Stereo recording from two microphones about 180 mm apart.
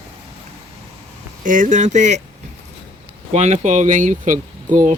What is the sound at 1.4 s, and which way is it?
Speech, 45° right (ahead or behind).